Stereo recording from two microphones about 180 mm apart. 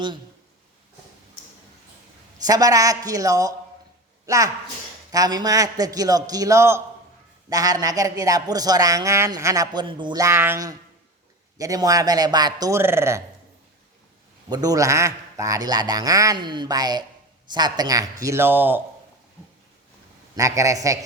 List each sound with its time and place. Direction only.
2.4 s a woman's voice: 20° right (ahead or behind)
14.5 s a woman's voice: 20° right (ahead or behind)
20.3 s a man's voice: 20° right (ahead or behind)